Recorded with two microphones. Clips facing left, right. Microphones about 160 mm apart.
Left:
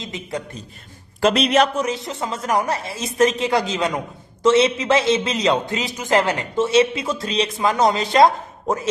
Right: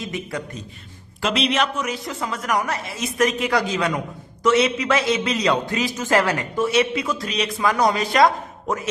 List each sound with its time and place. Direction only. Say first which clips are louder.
0.0 s a man's voice: even; 20° left (ahead or behind)
1.2 s a man's voice: left 5 dB; 45° left (ahead or behind)